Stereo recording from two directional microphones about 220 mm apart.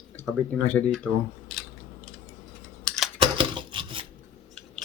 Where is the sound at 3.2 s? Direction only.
20° right (ahead or behind).